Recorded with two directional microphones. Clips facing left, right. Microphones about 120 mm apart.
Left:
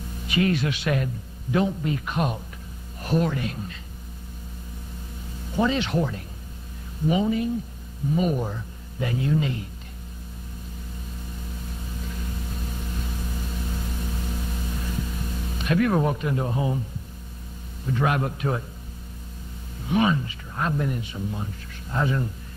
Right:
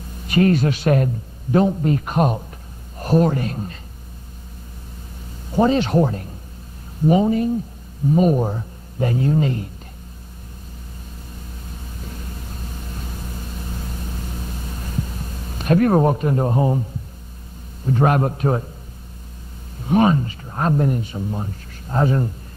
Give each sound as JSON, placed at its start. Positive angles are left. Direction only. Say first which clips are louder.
{"t": 0.3, "sound": "speech", "louder": "right 7 dB", "side_deg": -40}
{"t": 5.6, "sound": "speech", "louder": "right 7 dB", "side_deg": -40}
{"t": 15.5, "sound": "speech", "louder": "right 6 dB", "side_deg": -40}
{"t": 17.8, "sound": "speech", "louder": "right 6 dB", "side_deg": -40}
{"t": 19.9, "sound": "speech", "louder": "right 6 dB", "side_deg": -40}